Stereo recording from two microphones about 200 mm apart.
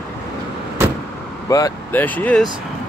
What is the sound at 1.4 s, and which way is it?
Speech, 15° left (ahead or behind).